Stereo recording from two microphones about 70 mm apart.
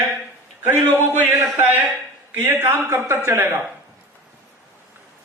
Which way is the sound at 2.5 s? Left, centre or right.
Right.